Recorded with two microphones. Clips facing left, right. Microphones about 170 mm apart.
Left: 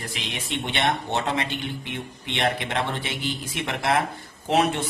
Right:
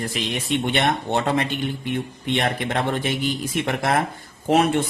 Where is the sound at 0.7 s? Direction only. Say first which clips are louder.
Right 1 dB; 50° right (ahead or behind).